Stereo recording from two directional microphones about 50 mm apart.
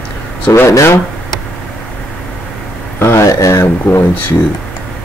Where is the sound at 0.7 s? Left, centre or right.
Left.